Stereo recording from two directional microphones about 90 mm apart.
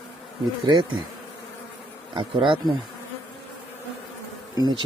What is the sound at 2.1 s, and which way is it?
Speech, 65° right (ahead or behind).